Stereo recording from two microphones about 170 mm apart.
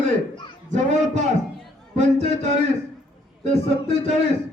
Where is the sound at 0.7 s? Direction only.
45° right (ahead or behind).